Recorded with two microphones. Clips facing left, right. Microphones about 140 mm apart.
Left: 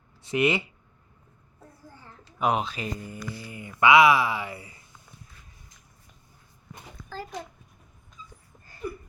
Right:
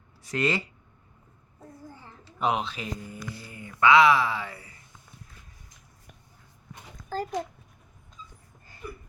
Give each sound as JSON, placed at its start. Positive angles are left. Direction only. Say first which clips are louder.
{"t": 0.2, "sound": "speech", "louder": "left 3 dB", "side_deg": 25}
{"t": 2.4, "sound": "speech", "louder": "left 2 dB", "side_deg": 5}
{"t": 7.1, "sound": "a child's voice", "louder": "right 7 dB", "side_deg": -45}